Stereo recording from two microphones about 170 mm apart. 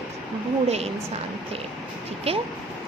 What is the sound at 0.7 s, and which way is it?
Speech, 40° right (ahead or behind).